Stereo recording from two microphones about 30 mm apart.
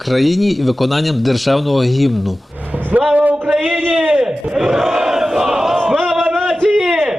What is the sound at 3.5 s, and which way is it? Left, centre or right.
Speech, right.